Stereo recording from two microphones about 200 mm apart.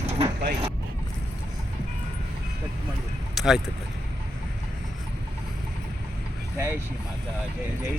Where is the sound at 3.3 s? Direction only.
Centre (ahead or behind).